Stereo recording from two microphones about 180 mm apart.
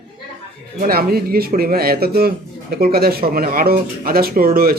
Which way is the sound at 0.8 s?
55° right (ahead or behind).